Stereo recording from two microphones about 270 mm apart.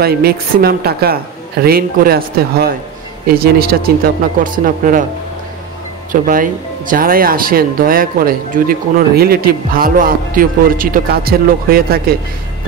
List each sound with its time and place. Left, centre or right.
0.0 s speech: right
6.2 s speech: right